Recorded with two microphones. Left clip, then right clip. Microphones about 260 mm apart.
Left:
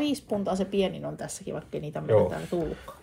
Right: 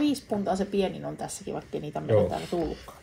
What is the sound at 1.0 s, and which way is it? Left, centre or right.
Speech, left.